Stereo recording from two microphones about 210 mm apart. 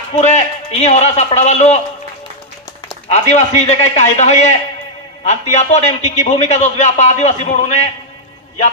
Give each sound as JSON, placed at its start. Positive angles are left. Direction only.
{"t": 0.2, "sound": "a man's voice", "side_deg": 30}
{"t": 3.1, "sound": "a man's voice", "side_deg": 35}